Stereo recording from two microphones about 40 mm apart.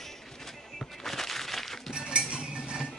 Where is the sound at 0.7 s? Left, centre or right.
Centre.